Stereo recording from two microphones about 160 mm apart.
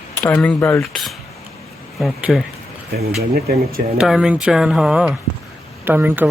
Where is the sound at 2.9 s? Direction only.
80° right.